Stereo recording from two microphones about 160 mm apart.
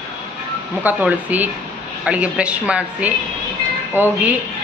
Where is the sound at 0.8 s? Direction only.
10° right (ahead or behind).